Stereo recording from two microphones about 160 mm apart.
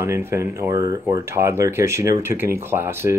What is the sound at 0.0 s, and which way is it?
Speech, 15° right (ahead or behind).